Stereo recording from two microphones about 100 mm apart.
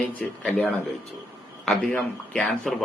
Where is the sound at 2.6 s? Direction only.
Centre (ahead or behind).